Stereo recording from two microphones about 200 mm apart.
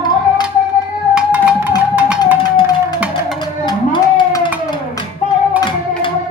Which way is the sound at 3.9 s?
25° left (ahead or behind).